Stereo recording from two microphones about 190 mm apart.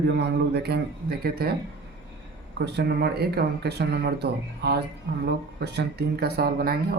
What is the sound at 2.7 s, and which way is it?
Speech, 60° right (ahead or behind).